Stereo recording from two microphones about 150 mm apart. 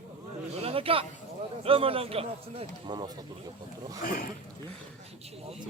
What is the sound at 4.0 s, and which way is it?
Speech, 65° left (ahead or behind).